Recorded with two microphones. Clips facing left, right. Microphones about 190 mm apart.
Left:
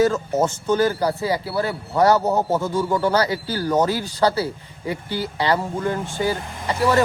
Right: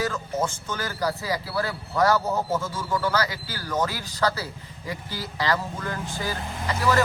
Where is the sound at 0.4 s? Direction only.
30° left (ahead or behind).